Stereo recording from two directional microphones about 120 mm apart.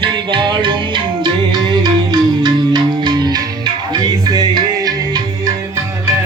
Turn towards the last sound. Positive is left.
turn(degrees=-35)  # may be behind; listen again after turning